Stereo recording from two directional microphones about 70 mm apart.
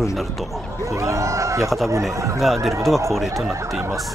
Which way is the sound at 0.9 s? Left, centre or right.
Right.